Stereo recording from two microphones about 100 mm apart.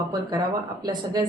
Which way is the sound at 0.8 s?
45° right (ahead or behind).